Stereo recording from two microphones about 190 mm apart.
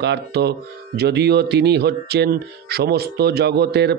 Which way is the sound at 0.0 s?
60° right (ahead or behind).